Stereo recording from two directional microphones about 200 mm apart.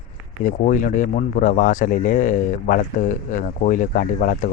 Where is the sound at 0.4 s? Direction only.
40° left (ahead or behind).